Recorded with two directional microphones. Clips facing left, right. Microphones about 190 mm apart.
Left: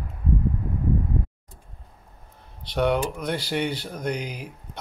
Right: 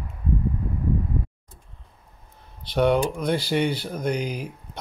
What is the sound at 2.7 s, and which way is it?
Speech, 10° right (ahead or behind).